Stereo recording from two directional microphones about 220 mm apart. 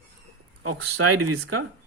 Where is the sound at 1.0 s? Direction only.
75° right (ahead or behind).